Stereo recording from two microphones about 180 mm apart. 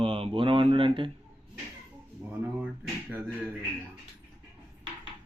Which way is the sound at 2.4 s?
10° right (ahead or behind).